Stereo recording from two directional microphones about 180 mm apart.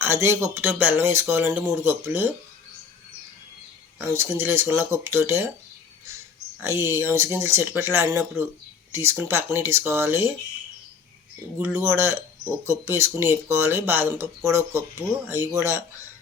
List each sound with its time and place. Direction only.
0.0 s speech: 15° right (ahead or behind)
3.9 s speech: 10° right (ahead or behind)
6.6 s speech: 15° right (ahead or behind)
11.5 s speech: 15° right (ahead or behind)